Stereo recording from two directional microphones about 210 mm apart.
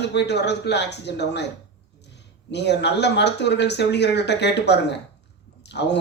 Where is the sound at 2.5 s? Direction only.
55° left (ahead or behind).